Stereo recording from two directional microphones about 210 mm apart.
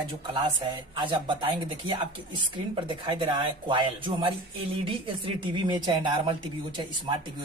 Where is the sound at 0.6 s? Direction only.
25° right (ahead or behind).